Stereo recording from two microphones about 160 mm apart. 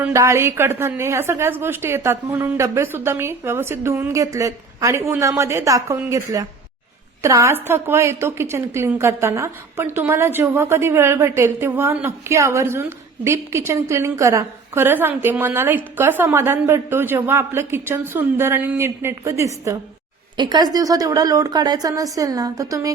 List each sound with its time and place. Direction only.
0.0 s a woman's voice: 20° right (ahead or behind)